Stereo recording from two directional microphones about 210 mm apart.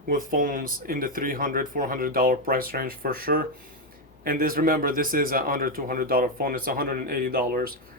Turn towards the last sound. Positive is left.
turn(degrees=-45)  # may be behind; listen again after turning